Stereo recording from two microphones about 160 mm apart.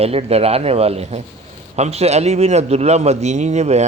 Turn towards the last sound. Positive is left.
turn(degrees=-45)  # may be behind; listen again after turning